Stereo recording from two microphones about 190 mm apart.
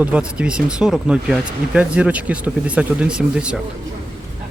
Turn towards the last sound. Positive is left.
turn(degrees=-5)  # may be behind; listen again after turning